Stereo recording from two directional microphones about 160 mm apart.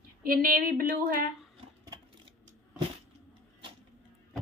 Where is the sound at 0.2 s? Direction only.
65° right (ahead or behind).